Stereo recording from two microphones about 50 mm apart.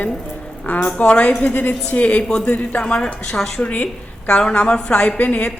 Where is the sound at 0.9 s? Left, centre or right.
Left.